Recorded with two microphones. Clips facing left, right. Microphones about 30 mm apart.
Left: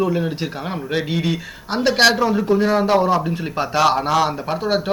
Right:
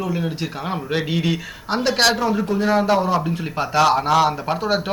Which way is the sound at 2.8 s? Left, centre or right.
Left.